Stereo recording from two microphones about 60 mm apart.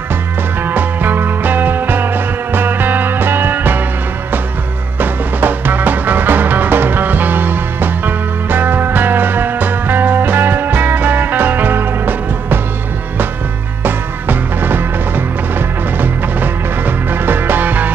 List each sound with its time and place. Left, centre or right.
0.7 s music: right
4.9 s music: right
13.8 s music: right